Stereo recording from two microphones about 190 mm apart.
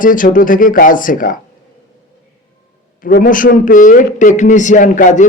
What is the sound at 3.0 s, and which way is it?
A man's voice, 45° left (ahead or behind).